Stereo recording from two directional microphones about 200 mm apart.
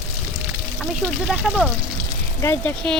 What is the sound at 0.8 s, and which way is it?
Speech, 5° right (ahead or behind).